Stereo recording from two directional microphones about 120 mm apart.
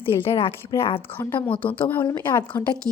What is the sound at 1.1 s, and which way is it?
A woman's voice, 15° left (ahead or behind).